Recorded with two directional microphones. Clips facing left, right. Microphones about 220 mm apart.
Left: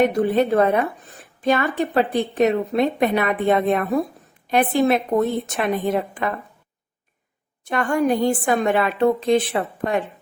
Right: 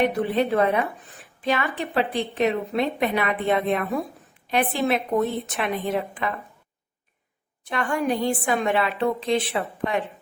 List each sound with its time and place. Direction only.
0.0 s a woman's voice: 45° left (ahead or behind)
7.7 s a woman's voice: 45° left (ahead or behind)